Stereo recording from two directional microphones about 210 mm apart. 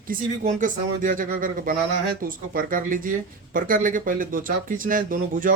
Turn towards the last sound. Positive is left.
turn(degrees=-40)  # may be behind; listen again after turning